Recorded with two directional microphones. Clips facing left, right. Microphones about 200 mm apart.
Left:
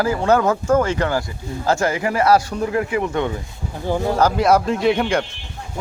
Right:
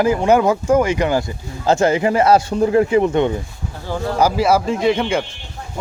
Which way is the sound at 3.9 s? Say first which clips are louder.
Left 3 dB; 15° left (ahead or behind).